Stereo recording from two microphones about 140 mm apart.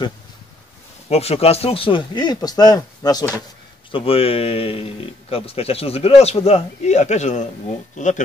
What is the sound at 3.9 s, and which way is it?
Speech, 40° left (ahead or behind).